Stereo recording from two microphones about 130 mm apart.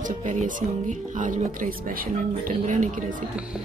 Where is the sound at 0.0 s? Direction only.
70° right (ahead or behind).